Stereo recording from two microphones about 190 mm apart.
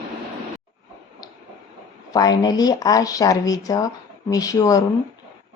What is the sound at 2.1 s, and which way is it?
A woman's voice, 20° left (ahead or behind).